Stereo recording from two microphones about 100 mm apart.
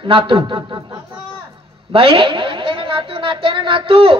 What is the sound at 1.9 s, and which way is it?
A woman's voice, 60° right (ahead or behind).